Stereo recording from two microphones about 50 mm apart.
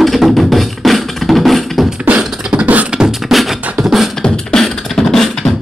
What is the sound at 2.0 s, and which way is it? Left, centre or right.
Beatboxing, right.